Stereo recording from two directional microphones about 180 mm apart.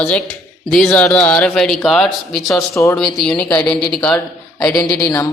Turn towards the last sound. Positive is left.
turn(degrees=15)  # may be behind; listen again after turning